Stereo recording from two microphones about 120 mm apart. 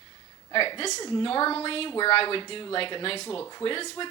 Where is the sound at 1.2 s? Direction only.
50° left (ahead or behind).